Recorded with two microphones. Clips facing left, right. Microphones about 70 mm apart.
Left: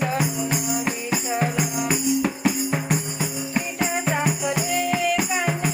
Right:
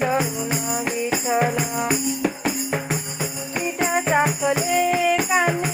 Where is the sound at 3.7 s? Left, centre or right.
Right.